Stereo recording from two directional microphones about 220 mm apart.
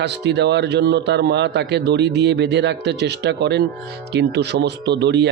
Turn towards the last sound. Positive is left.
turn(degrees=-50)  # may be behind; listen again after turning